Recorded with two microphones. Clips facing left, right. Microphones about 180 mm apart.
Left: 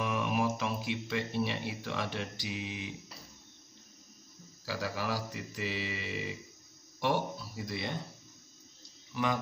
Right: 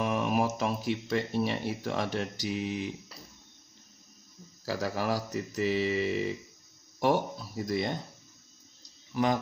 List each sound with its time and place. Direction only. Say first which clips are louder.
0.0 s speech: right 3 dB; 45° right (ahead or behind)
4.6 s mantra: right 5 dB; 45° right (ahead or behind)
9.1 s a man's voice: right 5 dB; 40° right (ahead or behind)